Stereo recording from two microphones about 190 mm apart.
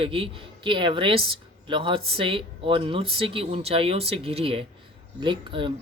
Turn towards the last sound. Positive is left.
turn(degrees=-25)  # may be behind; listen again after turning